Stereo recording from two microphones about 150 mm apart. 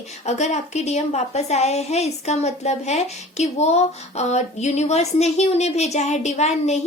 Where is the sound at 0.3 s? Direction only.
50° left (ahead or behind).